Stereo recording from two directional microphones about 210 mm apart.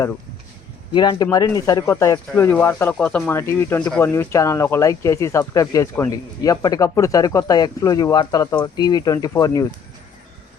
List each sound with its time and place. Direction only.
0.9 s speech: 20° left (ahead or behind)